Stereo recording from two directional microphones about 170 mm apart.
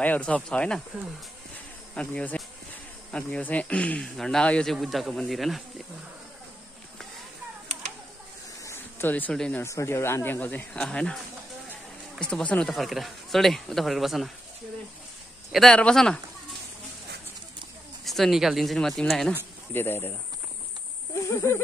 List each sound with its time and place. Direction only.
0.0 s speech: 10° left (ahead or behind)
2.0 s speech: 5° left (ahead or behind)
8.6 s speech: 15° left (ahead or behind)
12.2 s speech: 5° left (ahead or behind)
15.5 s speech: 5° left (ahead or behind)
18.0 s speech: centre (ahead or behind)
19.7 s speech: 15° left (ahead or behind)
21.1 s a sound: 15° left (ahead or behind)